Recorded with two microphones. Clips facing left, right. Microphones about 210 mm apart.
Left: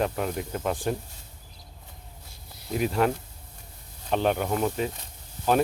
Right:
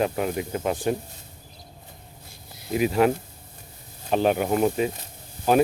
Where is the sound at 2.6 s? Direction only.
5° right (ahead or behind).